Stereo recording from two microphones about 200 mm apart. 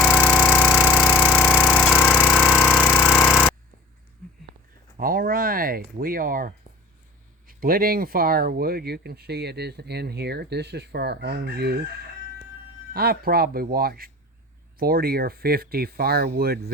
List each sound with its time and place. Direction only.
0.3 s a sound: centre (ahead or behind)
2.1 s jackhammer: centre (ahead or behind)
4.9 s speech: 45° right (ahead or behind)
12.9 s speech: 50° right (ahead or behind)